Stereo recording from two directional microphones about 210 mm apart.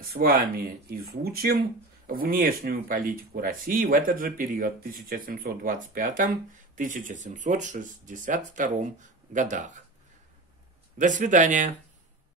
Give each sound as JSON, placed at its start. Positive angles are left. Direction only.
{"t": 0.2, "sound": "speech", "side_deg": -45}
{"t": 11.0, "sound": "speech", "side_deg": -35}